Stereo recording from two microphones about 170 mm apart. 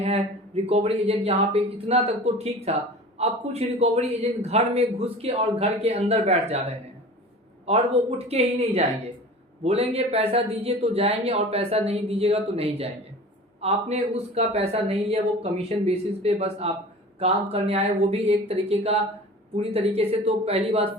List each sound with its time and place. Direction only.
0.0 s a man's voice: 35° right (ahead or behind)
8.2 s a man's voice: 35° right (ahead or behind)